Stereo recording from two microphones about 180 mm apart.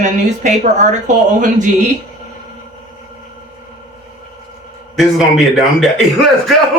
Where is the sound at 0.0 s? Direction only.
45° right (ahead or behind).